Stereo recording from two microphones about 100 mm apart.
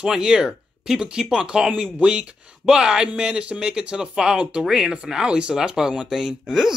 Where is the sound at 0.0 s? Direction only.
5° right (ahead or behind).